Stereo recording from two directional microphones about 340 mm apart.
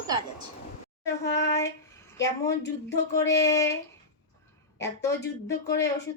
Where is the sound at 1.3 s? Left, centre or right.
Centre.